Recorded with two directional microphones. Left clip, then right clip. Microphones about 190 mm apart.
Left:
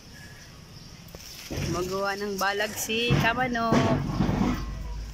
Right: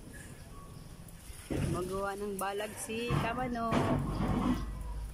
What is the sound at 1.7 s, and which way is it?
Speech, 20° left (ahead or behind).